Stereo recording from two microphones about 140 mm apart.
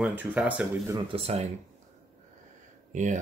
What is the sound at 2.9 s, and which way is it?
Speech, 60° right (ahead or behind).